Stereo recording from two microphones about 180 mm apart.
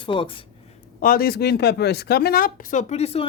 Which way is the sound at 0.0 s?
30° left (ahead or behind).